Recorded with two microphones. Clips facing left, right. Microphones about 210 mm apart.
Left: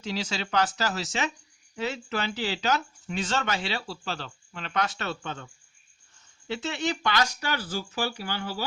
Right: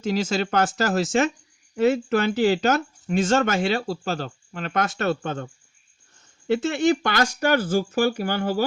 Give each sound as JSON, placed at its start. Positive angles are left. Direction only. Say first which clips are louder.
{"t": 0.0, "sound": "speech", "louder": "right 9 dB", "side_deg": -50}
{"t": 6.5, "sound": "speech", "louder": "right 10 dB", "side_deg": -50}